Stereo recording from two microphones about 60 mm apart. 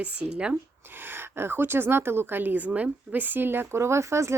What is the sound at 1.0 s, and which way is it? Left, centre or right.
A woman's voice, right.